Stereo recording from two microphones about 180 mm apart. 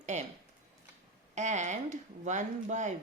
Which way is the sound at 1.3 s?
40° right (ahead or behind).